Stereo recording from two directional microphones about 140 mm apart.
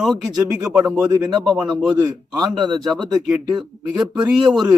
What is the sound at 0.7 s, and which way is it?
Speech, 5° right (ahead or behind).